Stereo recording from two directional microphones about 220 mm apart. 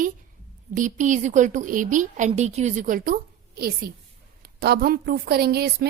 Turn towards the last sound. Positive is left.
turn(degrees=-45)  # may be behind; listen again after turning